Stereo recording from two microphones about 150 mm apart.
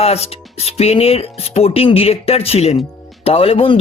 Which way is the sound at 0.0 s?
45° left (ahead or behind).